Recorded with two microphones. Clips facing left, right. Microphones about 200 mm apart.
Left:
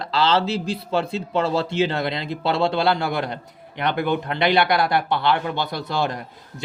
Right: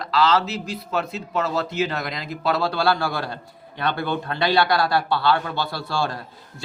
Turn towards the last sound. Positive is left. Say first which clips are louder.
# left 2 dB
turn(degrees=20)  # may be behind; listen again after turning